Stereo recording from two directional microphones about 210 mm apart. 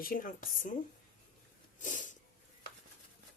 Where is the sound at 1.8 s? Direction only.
35° left (ahead or behind).